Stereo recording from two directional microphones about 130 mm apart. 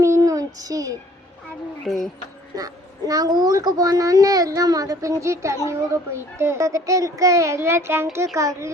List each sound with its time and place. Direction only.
0.0 s child singing: 25° right (ahead or behind)
1.9 s speech: centre (ahead or behind)
3.1 s a child's voice: 30° right (ahead or behind)